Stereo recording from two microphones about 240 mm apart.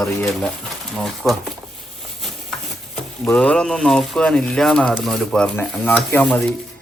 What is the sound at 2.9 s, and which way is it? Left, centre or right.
Speech, centre.